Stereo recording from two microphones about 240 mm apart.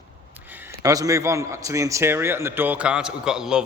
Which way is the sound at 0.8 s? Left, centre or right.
Centre.